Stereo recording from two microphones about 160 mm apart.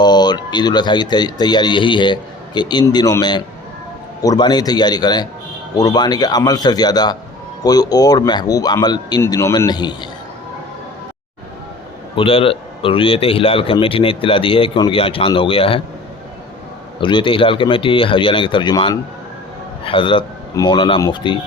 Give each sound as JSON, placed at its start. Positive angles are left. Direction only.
{"t": 0.0, "sound": "speech", "side_deg": 25}
{"t": 12.1, "sound": "a man's voice", "side_deg": 35}
{"t": 17.0, "sound": "a man's voice", "side_deg": 30}